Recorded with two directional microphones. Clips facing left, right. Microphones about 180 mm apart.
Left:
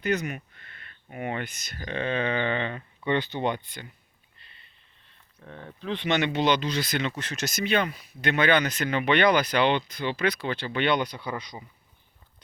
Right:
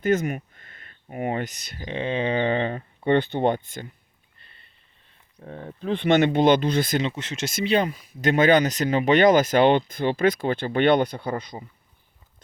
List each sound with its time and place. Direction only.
0.0 s a sound: 45° right (ahead or behind)
1.0 s speech: 35° right (ahead or behind)
1.7 s speech: 25° right (ahead or behind); by 3.8 s 45° right (ahead or behind)
5.4 s speech: 40° right (ahead or behind)
7.2 s speech: 25° right (ahead or behind); by 11.5 s 50° right (ahead or behind)